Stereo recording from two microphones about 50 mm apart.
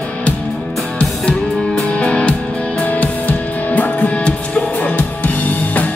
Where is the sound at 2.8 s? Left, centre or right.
Left.